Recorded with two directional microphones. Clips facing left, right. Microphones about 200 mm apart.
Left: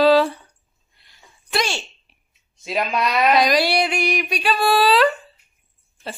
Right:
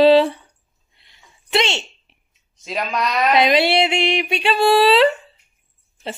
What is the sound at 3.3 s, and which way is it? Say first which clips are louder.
A child's voice: right 2 dB; 25° right (ahead or behind).